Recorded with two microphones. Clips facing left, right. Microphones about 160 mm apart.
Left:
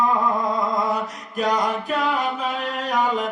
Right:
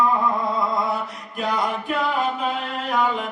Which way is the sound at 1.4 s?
40° left (ahead or behind).